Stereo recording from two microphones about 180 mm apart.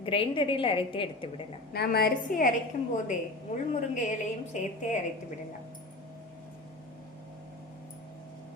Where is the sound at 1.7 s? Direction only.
60° left (ahead or behind); by 4.7 s 40° left (ahead or behind).